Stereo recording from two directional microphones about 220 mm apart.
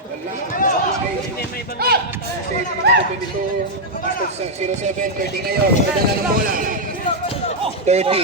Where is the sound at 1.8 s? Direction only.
45° right (ahead or behind).